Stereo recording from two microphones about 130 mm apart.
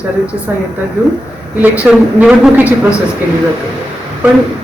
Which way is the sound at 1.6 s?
10° right (ahead or behind).